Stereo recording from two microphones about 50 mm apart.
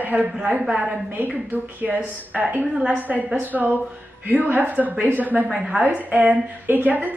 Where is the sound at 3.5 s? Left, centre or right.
Right.